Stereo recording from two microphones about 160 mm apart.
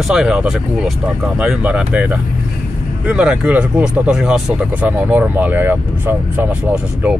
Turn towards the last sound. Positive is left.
turn(degrees=-10)  # may be behind; listen again after turning